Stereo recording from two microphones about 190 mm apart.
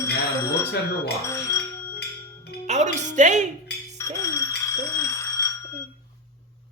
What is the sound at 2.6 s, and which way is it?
Speech, 40° right (ahead or behind).